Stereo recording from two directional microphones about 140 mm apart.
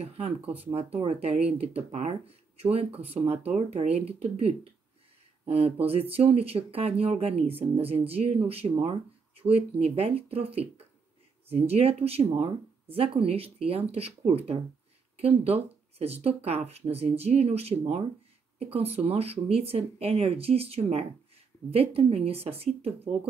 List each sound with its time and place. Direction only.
0.6 s speech: 45° right (ahead or behind)